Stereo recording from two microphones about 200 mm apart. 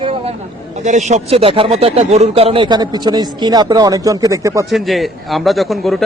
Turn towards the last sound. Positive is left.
turn(degrees=0)  # may be behind; listen again after turning